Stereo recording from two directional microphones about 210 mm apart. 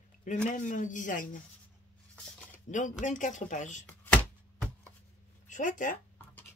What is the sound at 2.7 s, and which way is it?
Speech, 35° left (ahead or behind).